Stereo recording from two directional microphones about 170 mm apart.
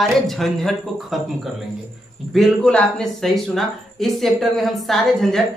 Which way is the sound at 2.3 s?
5° left (ahead or behind).